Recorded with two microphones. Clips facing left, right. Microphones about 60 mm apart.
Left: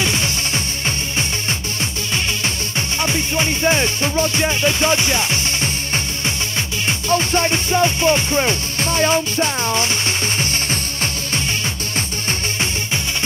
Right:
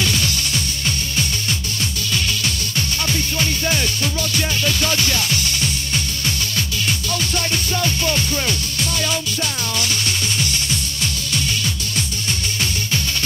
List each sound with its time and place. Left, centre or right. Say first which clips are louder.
0.0 s music: left 1 dB; left
3.0 s music: left 4 dB; left